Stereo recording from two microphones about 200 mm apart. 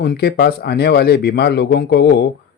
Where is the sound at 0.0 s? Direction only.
50° left (ahead or behind).